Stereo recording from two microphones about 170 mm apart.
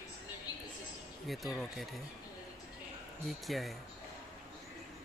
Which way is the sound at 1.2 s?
Centre (ahead or behind).